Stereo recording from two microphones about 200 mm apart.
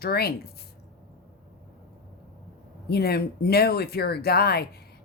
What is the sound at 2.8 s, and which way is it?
A woman's voice, 50° left (ahead or behind).